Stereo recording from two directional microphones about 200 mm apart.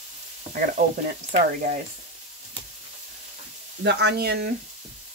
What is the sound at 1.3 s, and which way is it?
Speech, 40° right (ahead or behind).